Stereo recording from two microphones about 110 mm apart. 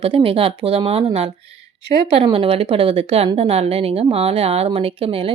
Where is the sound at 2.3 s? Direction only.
60° right (ahead or behind).